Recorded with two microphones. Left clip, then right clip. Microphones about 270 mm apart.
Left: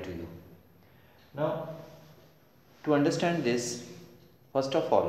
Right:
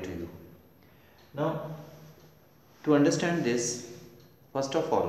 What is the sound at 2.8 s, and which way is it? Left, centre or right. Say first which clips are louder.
A man's voice: right 2 dB; centre.